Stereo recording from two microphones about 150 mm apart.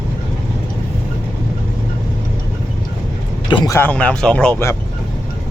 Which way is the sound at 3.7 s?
10° left (ahead or behind).